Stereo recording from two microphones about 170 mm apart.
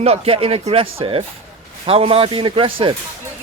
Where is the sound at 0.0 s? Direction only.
35° right (ahead or behind).